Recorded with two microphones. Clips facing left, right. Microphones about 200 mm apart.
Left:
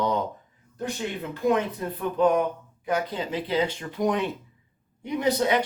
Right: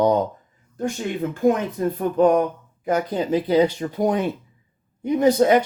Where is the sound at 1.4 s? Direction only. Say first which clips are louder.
Right 4 dB; 45° right (ahead or behind).